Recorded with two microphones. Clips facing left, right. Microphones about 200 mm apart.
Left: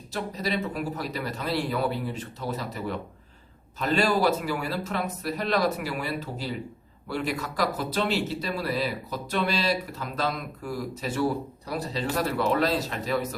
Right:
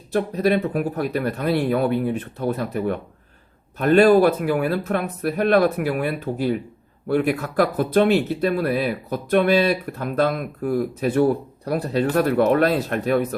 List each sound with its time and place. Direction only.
0.1 s speech: 55° right (ahead or behind)